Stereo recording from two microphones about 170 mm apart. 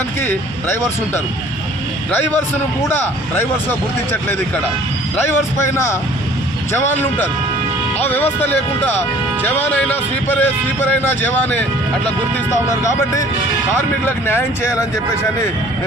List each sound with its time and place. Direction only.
0.2 s speech: 15° left (ahead or behind)
5.7 s speech: 15° left (ahead or behind)
14.0 s speech: 15° left (ahead or behind)